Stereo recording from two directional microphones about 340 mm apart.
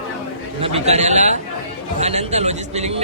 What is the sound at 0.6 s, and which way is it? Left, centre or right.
Speech, centre.